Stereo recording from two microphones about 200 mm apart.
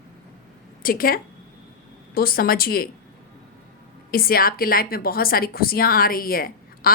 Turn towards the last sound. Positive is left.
turn(degrees=45)  # may be behind; listen again after turning